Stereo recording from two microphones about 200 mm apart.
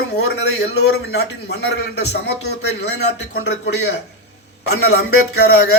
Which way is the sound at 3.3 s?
55° left (ahead or behind).